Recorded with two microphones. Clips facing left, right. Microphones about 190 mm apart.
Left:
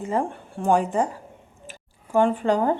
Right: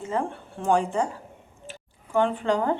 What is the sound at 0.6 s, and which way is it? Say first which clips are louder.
Speech: left 2 dB; 15° left (ahead or behind).